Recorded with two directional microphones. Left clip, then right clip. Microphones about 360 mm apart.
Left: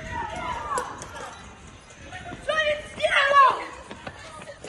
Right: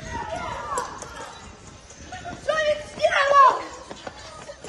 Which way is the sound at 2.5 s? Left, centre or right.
Right.